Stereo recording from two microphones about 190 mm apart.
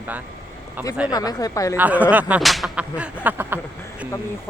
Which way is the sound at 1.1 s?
20° left (ahead or behind).